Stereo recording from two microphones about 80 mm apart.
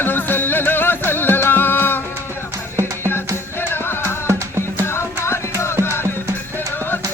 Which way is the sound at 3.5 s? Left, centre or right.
Left.